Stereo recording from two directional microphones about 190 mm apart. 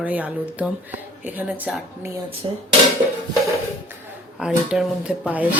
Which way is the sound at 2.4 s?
25° right (ahead or behind).